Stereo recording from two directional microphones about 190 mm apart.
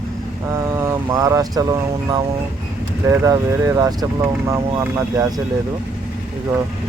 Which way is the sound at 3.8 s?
20° right (ahead or behind).